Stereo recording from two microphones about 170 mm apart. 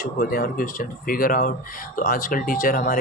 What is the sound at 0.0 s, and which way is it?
Speech, 55° left (ahead or behind).